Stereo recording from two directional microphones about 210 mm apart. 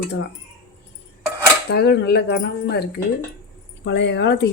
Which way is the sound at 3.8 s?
55° left (ahead or behind).